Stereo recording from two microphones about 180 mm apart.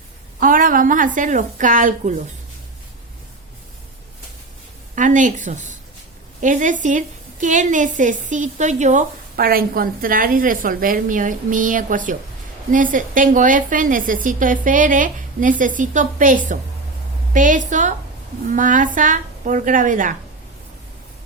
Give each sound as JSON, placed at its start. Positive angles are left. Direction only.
{"t": 0.3, "sound": "a woman's voice", "side_deg": -50}
{"t": 4.9, "sound": "a woman's voice", "side_deg": -45}